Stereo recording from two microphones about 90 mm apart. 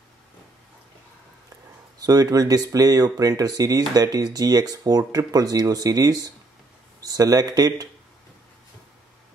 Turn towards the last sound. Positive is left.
turn(degrees=-45)  # may be behind; listen again after turning